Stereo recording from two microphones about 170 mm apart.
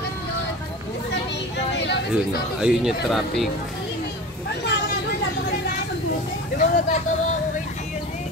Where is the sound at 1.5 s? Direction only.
90° left.